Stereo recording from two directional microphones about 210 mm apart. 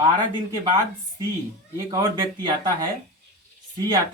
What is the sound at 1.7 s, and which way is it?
Speech, 20° right (ahead or behind).